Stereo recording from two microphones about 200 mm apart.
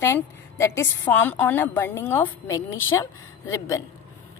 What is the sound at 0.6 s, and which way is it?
A woman's voice, 10° left (ahead or behind).